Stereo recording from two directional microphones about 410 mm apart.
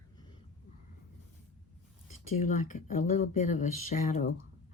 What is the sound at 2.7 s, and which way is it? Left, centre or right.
Speech, centre.